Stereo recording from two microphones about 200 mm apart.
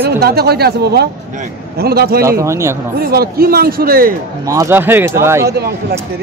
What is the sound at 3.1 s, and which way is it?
A man's voice, 50° right (ahead or behind).